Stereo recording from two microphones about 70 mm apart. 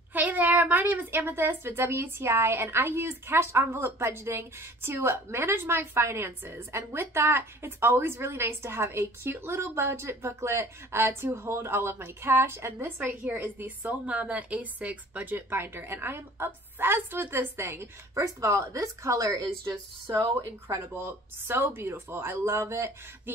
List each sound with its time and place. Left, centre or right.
0.1 s a woman's voice: right
18.1 s a woman's voice: right
20.2 s a woman's voice: right